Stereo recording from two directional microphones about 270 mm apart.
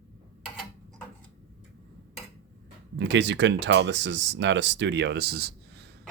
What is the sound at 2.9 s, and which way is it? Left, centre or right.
Speech, right.